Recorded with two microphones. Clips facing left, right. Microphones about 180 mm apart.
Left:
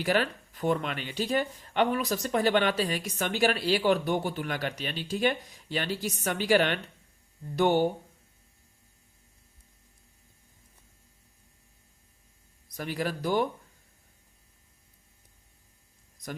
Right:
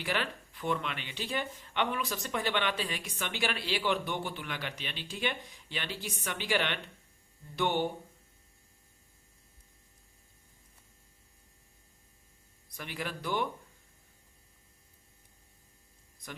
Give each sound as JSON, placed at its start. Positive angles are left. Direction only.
{"t": 0.0, "sound": "speech", "side_deg": 40}
{"t": 12.6, "sound": "speech", "side_deg": 40}